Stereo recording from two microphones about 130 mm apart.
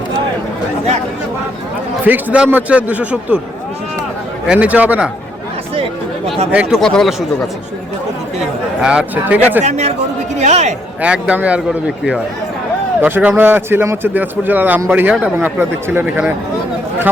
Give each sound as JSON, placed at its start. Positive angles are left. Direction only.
{"t": 2.0, "sound": "speech", "side_deg": -10}
{"t": 4.4, "sound": "speech", "side_deg": -10}
{"t": 6.5, "sound": "speech", "side_deg": -10}
{"t": 6.7, "sound": "speech", "side_deg": 5}
{"t": 8.8, "sound": "speech", "side_deg": -10}
{"t": 9.6, "sound": "a man's voice", "side_deg": -60}
{"t": 11.0, "sound": "speech", "side_deg": -10}